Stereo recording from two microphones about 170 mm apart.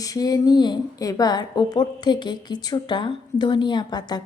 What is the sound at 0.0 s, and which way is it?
A woman's voice, 20° left (ahead or behind).